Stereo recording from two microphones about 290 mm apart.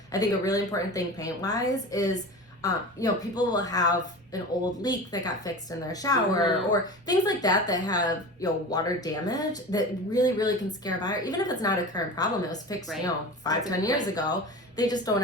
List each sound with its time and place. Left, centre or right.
0.1 s speech: centre